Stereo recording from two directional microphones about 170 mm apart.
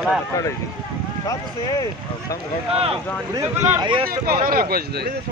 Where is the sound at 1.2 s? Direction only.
20° left (ahead or behind).